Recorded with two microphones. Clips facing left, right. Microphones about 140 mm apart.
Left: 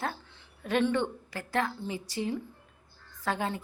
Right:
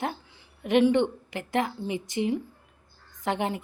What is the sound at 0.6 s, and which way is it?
A woman's voice, 15° right (ahead or behind).